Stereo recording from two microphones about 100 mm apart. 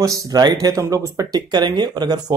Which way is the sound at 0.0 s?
35° right (ahead or behind).